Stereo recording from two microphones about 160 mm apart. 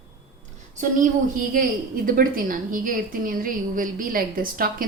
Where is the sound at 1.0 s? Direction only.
60° right (ahead or behind).